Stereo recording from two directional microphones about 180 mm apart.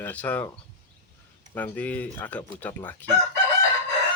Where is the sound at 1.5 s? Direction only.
10° left (ahead or behind).